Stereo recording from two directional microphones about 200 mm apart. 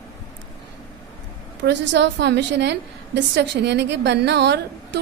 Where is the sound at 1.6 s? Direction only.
60° right (ahead or behind).